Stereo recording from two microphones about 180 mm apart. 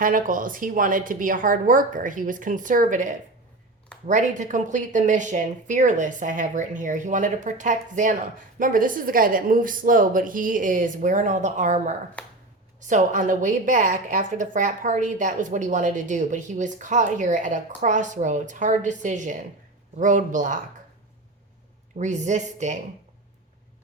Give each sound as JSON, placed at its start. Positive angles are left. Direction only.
{"t": 0.0, "sound": "a woman's voice", "side_deg": -50}
{"t": 12.2, "sound": "finger snapping", "side_deg": 5}
{"t": 12.9, "sound": "a woman's voice", "side_deg": -45}
{"t": 21.9, "sound": "speech", "side_deg": -40}